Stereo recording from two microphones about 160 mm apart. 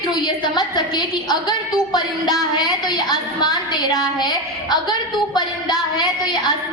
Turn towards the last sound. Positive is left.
turn(degrees=25)  # may be behind; listen again after turning